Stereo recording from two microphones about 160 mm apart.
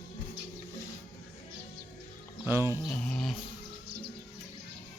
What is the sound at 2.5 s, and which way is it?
Mantra, 15° right (ahead or behind).